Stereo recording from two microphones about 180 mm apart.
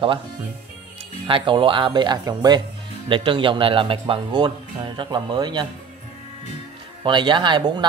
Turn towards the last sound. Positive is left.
turn(degrees=-25)  # may be behind; listen again after turning